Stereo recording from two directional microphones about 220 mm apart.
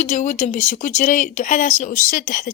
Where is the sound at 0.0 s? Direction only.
35° left (ahead or behind).